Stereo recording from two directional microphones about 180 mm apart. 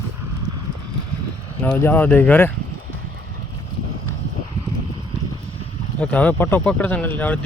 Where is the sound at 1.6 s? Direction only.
10° left (ahead or behind).